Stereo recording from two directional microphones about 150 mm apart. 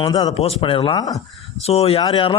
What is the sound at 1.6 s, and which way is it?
Speech, 45° left (ahead or behind).